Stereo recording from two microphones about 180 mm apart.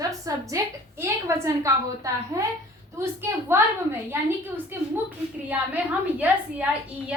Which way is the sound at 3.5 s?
10° right (ahead or behind).